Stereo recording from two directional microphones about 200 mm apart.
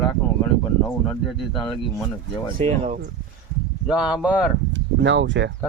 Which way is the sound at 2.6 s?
35° right (ahead or behind).